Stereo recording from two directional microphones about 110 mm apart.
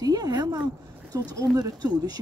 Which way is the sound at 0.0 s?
35° right (ahead or behind).